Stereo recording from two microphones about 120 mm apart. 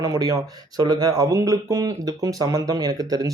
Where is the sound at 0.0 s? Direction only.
30° right (ahead or behind).